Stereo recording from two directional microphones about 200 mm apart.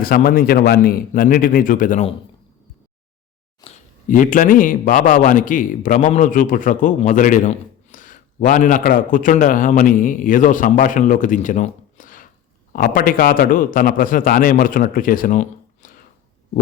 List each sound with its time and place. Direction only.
0.0 s a man's voice: 45° left (ahead or behind)
4.1 s a man's voice: 40° left (ahead or behind)